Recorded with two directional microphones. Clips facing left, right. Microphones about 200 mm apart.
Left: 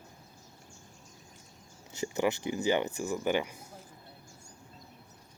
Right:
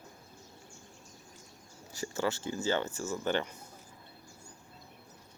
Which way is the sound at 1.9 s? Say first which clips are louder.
Left 3 dB; 20° left (ahead or behind).